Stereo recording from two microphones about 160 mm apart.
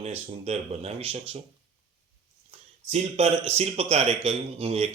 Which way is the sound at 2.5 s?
40° right (ahead or behind).